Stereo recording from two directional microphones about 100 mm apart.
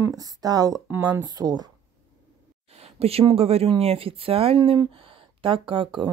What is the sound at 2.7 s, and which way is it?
Speech, 90° right.